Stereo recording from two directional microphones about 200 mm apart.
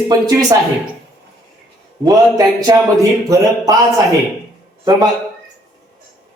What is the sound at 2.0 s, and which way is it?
Speech, 15° right (ahead or behind).